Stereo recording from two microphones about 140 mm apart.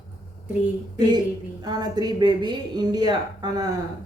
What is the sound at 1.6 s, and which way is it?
A woman's voice, 30° right (ahead or behind).